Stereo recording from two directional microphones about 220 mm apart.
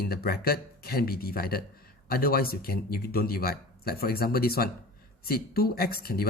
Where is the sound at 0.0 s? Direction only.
45° left (ahead or behind).